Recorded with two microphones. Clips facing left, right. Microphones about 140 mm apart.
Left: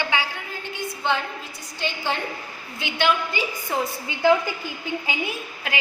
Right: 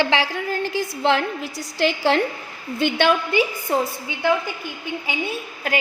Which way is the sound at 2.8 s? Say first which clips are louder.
Right 4 dB; 60° right (ahead or behind).